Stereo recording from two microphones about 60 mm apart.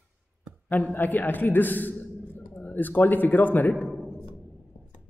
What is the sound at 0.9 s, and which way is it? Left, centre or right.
A man's voice, left.